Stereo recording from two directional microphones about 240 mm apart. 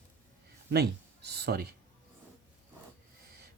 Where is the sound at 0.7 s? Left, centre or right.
Right.